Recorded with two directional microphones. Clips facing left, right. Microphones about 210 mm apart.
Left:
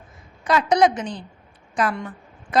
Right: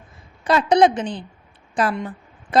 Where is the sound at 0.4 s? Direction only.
30° right (ahead or behind).